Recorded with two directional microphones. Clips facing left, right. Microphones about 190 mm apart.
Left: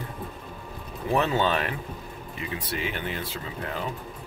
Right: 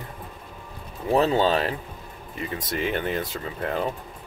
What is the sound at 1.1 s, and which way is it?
Speech, 35° right (ahead or behind).